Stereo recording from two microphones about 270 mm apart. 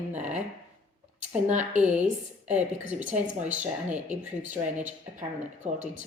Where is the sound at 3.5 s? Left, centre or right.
Centre.